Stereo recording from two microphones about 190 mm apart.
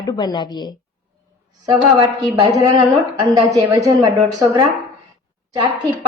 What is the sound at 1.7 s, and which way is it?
Speech, 25° right (ahead or behind).